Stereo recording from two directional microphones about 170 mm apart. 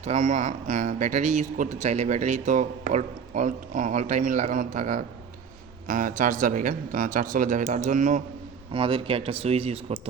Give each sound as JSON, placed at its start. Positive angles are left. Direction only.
{"t": 0.0, "sound": "a man's voice", "side_deg": -45}
{"t": 8.7, "sound": "speech", "side_deg": -30}